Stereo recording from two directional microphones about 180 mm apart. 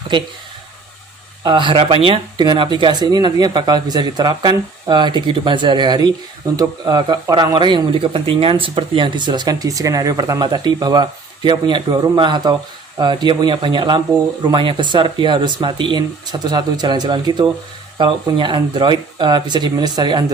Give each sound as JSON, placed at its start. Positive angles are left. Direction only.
{"t": 1.5, "sound": "speech", "side_deg": -25}